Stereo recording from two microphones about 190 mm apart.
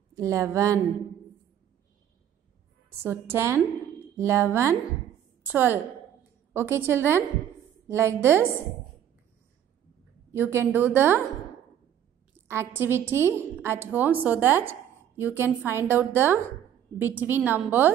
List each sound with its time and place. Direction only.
0.1 s a woman's voice: 15° right (ahead or behind)
3.0 s a woman's voice: 10° right (ahead or behind)
10.3 s a woman's voice: 10° right (ahead or behind)
12.4 s a woman's voice: 10° right (ahead or behind)